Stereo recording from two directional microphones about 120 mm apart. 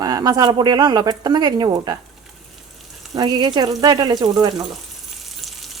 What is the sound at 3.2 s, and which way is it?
Speech, 40° right (ahead or behind).